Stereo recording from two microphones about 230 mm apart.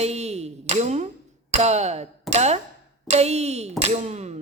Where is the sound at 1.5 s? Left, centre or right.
Right.